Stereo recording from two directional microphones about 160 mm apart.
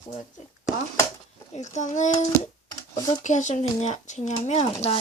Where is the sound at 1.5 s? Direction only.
45° left (ahead or behind).